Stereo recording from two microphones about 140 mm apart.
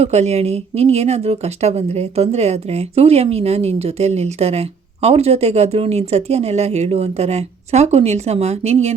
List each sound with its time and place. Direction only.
0.0 s speech: 50° right (ahead or behind)